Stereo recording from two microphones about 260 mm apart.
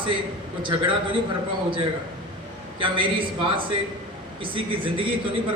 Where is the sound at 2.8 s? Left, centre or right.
Centre.